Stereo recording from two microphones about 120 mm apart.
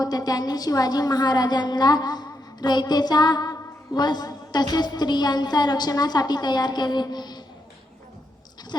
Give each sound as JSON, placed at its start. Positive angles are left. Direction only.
{"t": 0.0, "sound": "a woman's voice", "side_deg": 30}
{"t": 8.7, "sound": "goat", "side_deg": 35}